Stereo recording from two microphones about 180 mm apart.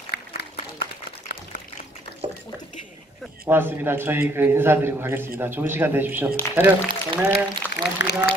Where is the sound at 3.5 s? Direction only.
10° right (ahead or behind).